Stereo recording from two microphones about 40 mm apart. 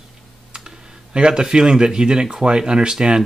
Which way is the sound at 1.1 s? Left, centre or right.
Right.